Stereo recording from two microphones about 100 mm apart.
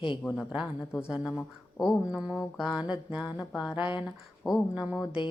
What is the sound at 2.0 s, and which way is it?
Speech, 10° right (ahead or behind).